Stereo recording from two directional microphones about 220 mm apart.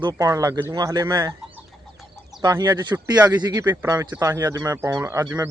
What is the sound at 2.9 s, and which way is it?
Speech, 10° right (ahead or behind).